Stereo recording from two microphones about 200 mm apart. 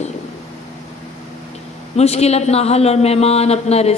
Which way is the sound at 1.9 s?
30° left (ahead or behind).